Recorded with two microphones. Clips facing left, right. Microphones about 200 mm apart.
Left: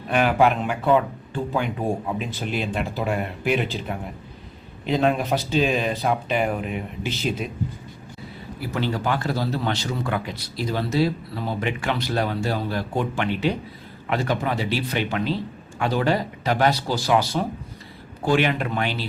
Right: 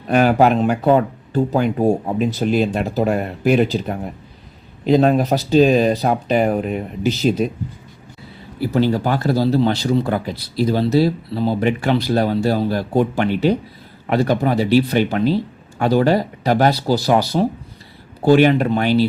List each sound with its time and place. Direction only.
0.1 s a man's voice: 40° right (ahead or behind)
8.7 s a man's voice: 35° right (ahead or behind)